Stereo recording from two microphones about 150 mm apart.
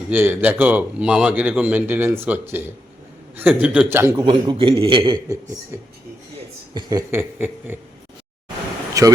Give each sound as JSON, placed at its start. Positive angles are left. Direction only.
{"t": 0.1, "sound": "a man's voice", "side_deg": -10}
{"t": 4.2, "sound": "a man's voice", "side_deg": -30}
{"t": 5.7, "sound": "a man's voice", "side_deg": -20}
{"t": 7.1, "sound": "a man's voice", "side_deg": -15}
{"t": 9.0, "sound": "speech", "side_deg": -20}